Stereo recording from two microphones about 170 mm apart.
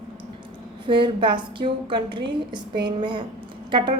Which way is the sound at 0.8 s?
30° right (ahead or behind).